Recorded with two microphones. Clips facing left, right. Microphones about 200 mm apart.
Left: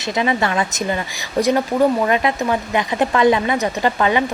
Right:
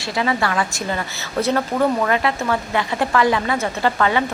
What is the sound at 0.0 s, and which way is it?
A woman's voice, 20° left (ahead or behind).